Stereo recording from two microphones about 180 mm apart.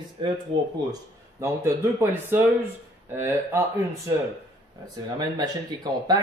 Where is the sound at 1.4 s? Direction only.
15° right (ahead or behind).